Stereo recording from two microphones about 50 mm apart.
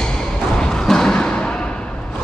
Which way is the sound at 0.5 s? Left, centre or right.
Centre.